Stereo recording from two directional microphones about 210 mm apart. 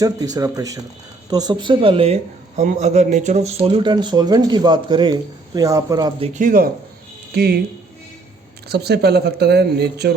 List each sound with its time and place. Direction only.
0.0 s speech: 15° right (ahead or behind); by 7.6 s 50° right (ahead or behind)
8.7 s speech: 50° right (ahead or behind)